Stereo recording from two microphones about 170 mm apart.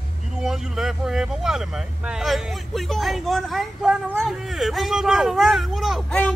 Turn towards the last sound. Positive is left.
turn(degrees=5)  # may be behind; listen again after turning